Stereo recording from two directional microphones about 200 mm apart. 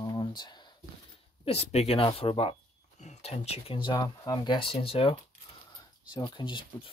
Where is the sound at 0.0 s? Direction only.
20° left (ahead or behind).